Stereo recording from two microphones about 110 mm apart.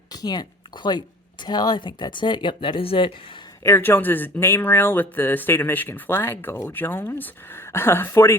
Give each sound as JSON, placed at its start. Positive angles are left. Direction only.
{"t": 0.1, "sound": "speech", "side_deg": 35}
{"t": 3.6, "sound": "speech", "side_deg": 20}